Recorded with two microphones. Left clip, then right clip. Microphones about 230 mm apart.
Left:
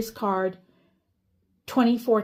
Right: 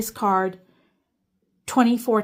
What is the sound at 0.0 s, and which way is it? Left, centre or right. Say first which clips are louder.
Speech: right 4 dB; right.